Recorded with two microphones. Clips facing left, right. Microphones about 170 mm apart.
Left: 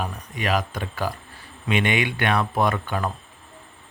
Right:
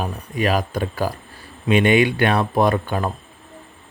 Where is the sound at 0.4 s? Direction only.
35° right (ahead or behind).